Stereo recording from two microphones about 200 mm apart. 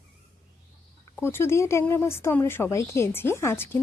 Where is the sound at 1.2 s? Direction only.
10° left (ahead or behind).